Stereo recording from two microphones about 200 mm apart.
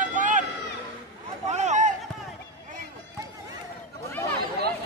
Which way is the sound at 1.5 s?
35° right (ahead or behind).